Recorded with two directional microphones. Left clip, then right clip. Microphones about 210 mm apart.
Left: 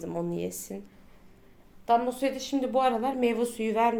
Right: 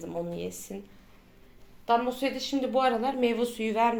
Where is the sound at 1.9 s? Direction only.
Centre (ahead or behind).